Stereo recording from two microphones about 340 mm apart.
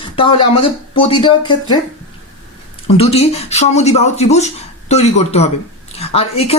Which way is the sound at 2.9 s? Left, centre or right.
Centre.